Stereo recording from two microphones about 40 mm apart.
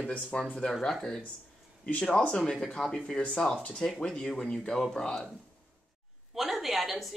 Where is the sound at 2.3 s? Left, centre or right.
Centre.